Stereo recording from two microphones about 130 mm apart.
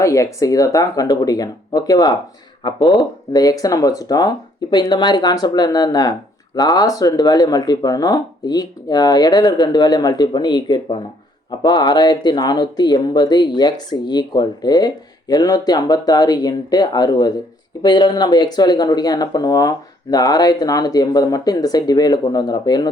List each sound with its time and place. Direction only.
0.0 s speech: 25° left (ahead or behind)